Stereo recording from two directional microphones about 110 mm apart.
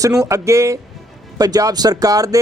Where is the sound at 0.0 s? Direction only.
30° right (ahead or behind).